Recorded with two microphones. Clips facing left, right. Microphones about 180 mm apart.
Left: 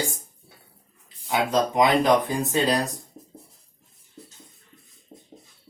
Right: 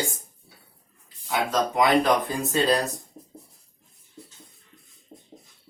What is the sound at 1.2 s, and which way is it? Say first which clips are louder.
Speech: left 2 dB; 15° left (ahead or behind).